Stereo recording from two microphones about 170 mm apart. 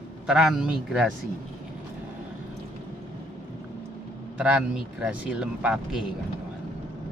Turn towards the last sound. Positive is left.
turn(degrees=-5)  # may be behind; listen again after turning